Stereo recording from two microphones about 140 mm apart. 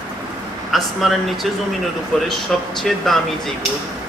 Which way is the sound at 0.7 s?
Centre (ahead or behind).